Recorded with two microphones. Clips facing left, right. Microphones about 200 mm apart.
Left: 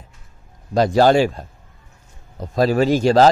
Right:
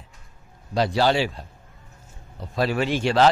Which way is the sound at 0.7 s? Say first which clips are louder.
Left 7 dB; 45° left (ahead or behind).